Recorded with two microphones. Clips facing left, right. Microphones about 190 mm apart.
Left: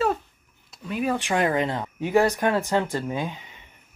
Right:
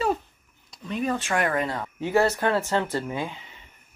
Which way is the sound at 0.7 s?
5° left (ahead or behind).